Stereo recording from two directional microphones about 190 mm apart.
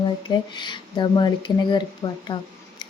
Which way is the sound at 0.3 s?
25° left (ahead or behind).